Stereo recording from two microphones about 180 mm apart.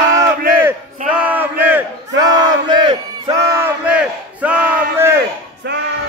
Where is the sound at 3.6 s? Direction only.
10° right (ahead or behind).